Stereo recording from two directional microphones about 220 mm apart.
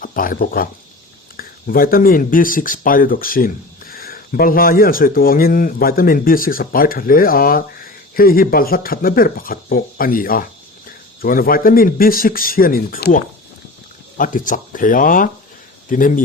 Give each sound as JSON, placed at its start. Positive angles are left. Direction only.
{"t": 0.0, "sound": "speech", "side_deg": 40}